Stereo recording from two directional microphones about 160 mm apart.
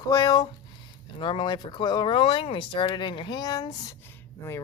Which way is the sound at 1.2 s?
30° left (ahead or behind).